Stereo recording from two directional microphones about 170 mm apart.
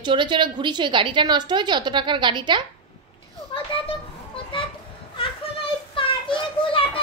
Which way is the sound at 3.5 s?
25° left (ahead or behind).